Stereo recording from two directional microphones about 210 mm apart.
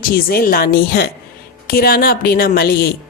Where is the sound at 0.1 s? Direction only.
45° left (ahead or behind).